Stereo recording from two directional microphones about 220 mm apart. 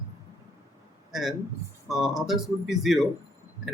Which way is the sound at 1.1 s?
Centre (ahead or behind).